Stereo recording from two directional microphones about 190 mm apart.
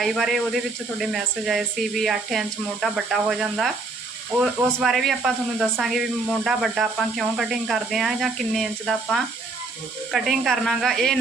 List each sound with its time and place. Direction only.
0.0 s speech: centre (ahead or behind)